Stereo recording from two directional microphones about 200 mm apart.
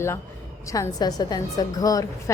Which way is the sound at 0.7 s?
20° left (ahead or behind).